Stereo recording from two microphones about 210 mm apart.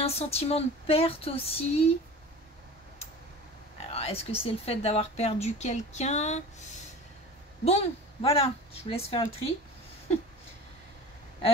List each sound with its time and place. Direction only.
0.0 s speech: 30° left (ahead or behind)
3.8 s speech: 30° left (ahead or behind)
7.6 s speech: 30° left (ahead or behind)